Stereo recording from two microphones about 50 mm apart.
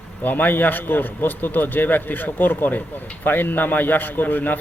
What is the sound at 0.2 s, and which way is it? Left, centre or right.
Speech, left.